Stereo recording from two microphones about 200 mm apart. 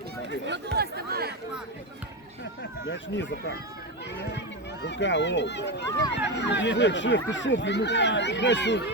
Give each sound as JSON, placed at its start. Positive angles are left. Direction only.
{"t": 0.4, "sound": "speech", "side_deg": -60}
{"t": 2.4, "sound": "speech", "side_deg": 65}